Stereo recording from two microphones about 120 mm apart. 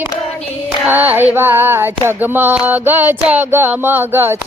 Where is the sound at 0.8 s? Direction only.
15° right (ahead or behind).